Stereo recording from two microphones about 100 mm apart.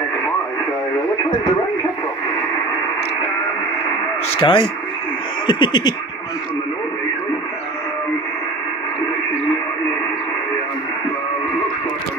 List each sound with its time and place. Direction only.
4.3 s speech: 60° left (ahead or behind)
5.5 s music: 50° left (ahead or behind)